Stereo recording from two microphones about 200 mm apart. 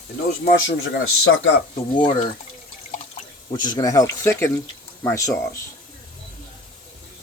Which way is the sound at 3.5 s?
20° left (ahead or behind).